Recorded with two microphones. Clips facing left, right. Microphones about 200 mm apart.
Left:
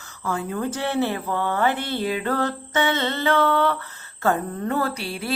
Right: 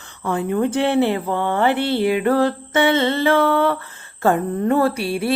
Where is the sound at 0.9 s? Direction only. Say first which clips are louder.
Right 5 dB; 20° right (ahead or behind).